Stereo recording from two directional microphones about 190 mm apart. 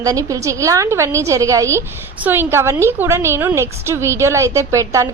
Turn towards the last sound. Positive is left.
turn(degrees=-15)  # may be behind; listen again after turning